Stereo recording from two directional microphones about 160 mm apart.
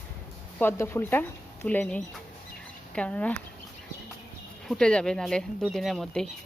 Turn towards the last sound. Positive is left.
turn(degrees=5)  # may be behind; listen again after turning